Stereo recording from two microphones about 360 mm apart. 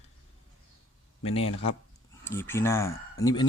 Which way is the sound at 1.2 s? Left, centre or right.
Centre.